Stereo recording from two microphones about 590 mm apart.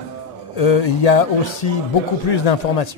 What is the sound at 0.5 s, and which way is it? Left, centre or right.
Speech, left.